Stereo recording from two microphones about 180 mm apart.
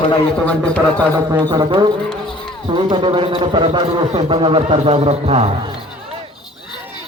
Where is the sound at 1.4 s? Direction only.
25° right (ahead or behind).